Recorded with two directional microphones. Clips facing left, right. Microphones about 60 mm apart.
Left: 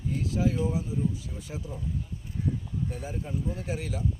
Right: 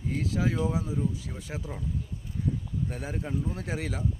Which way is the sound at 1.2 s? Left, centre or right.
Right.